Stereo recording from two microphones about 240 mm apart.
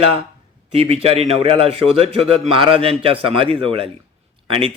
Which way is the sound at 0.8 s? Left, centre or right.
Right.